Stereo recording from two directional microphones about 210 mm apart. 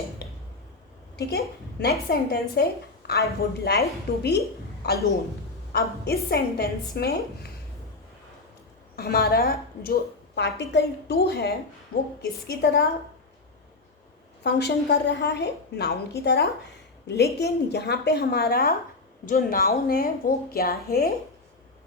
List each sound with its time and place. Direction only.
0.2 s a sound: 50° left (ahead or behind)
1.1 s a woman's voice: 50° left (ahead or behind)
5.7 s a woman's voice: 50° left (ahead or behind)
9.0 s a woman's voice: 45° left (ahead or behind)
14.4 s a woman's voice: 55° left (ahead or behind)